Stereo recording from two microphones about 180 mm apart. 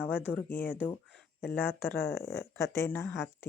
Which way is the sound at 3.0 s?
Centre (ahead or behind).